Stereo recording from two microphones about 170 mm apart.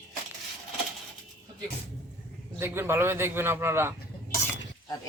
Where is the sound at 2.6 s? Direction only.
15° right (ahead or behind).